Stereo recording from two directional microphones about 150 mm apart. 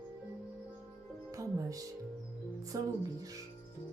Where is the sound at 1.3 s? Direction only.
20° right (ahead or behind).